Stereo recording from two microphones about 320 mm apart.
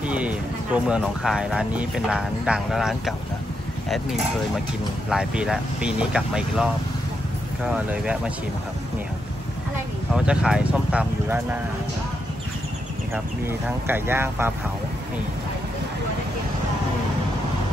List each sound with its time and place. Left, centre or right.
0.0 s a sound: centre
0.8 s speech: centre
5.1 s speech: centre
10.1 s speech: centre
13.1 s speech: centre